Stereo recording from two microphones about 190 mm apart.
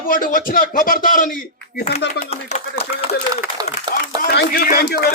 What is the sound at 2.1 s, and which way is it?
Speech, 35° left (ahead or behind).